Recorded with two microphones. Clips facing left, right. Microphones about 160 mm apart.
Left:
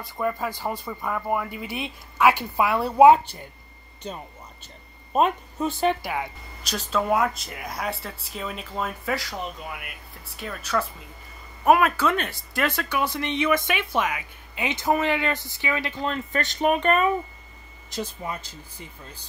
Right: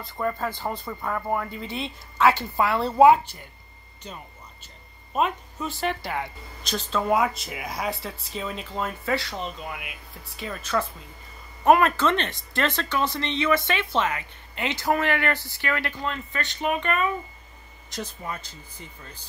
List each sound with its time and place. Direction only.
0.0 s speech: 10° left (ahead or behind)
5.1 s speech: 35° left (ahead or behind)
5.8 s speech: 15° left (ahead or behind)
16.1 s speech: 45° left (ahead or behind)
17.9 s speech: 10° left (ahead or behind)